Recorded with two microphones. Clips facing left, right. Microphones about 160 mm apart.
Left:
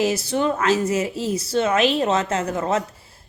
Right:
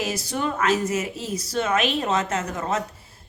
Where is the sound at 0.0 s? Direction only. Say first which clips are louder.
Left 6 dB; 30° left (ahead or behind).